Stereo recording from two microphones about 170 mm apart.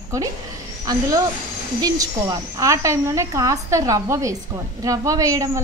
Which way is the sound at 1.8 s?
20° right (ahead or behind).